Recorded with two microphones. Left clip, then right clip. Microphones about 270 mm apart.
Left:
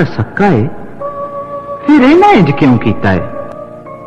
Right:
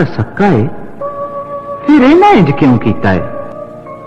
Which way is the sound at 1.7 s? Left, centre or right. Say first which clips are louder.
Even; left.